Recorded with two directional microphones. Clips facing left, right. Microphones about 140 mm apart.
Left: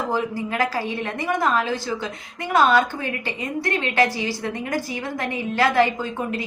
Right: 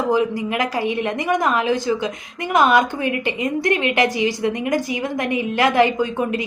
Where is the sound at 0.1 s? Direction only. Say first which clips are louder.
Right 5 dB; 15° right (ahead or behind).